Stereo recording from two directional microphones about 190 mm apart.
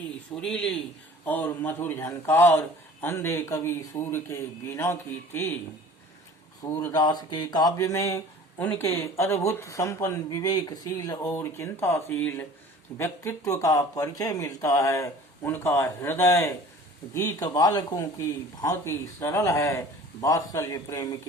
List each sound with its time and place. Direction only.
0.4 s a man's voice: 5° left (ahead or behind)
6.6 s speech: 20° left (ahead or behind)